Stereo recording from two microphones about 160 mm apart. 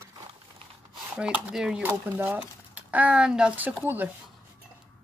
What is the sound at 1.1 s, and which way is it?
Speech, 5° right (ahead or behind).